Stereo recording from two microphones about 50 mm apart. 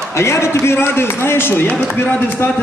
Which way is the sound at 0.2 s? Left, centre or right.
Left.